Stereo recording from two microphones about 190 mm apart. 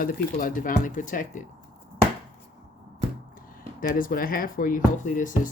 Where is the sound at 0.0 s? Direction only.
45° left (ahead or behind).